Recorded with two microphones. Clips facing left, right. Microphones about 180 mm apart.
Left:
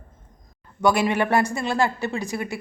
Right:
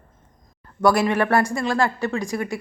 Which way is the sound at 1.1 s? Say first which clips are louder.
Right 1 dB; 20° left (ahead or behind).